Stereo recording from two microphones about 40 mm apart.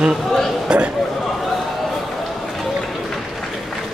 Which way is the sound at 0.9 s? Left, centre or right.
Centre.